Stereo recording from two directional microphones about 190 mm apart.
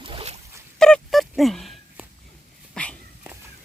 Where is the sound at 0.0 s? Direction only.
30° right (ahead or behind).